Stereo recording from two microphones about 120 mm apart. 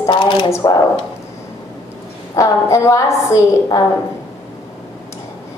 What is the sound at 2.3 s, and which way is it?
A woman's voice, 25° left (ahead or behind).